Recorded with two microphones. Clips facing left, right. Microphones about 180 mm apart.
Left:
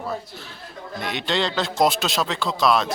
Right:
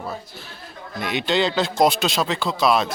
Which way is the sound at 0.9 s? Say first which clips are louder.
Right 3 dB; 5° right (ahead or behind).